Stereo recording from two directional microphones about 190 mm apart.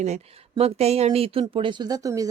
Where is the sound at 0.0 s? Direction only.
35° right (ahead or behind).